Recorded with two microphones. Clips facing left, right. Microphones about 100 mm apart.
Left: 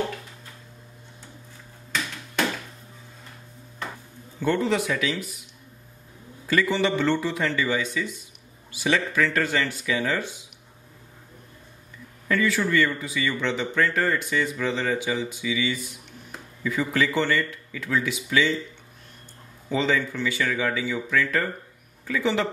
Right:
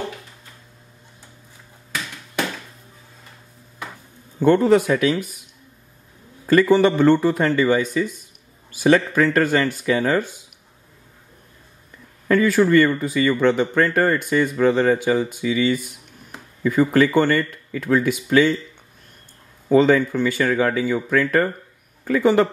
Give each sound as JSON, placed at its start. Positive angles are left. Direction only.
{"t": 4.4, "sound": "speech", "side_deg": -45}
{"t": 6.4, "sound": "speech", "side_deg": -45}
{"t": 12.3, "sound": "speech", "side_deg": -45}
{"t": 19.7, "sound": "speech", "side_deg": -50}